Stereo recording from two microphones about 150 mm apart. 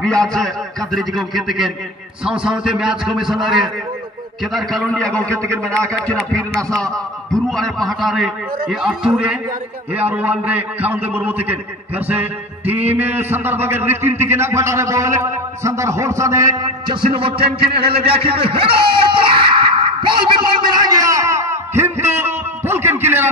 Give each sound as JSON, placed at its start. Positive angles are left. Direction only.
{"t": 0.0, "sound": "a man's voice", "side_deg": 5}